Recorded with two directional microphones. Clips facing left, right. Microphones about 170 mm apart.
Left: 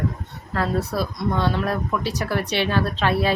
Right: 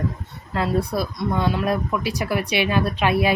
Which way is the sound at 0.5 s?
10° right (ahead or behind).